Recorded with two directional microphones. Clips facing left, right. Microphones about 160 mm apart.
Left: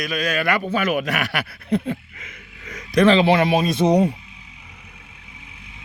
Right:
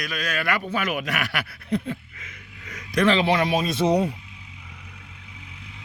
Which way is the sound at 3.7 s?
15° left (ahead or behind).